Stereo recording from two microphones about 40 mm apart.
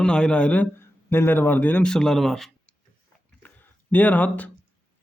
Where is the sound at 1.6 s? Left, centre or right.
Left.